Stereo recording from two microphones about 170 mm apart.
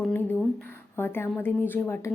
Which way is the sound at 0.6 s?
10° left (ahead or behind).